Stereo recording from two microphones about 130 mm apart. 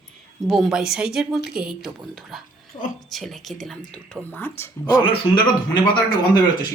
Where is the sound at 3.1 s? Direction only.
Centre (ahead or behind).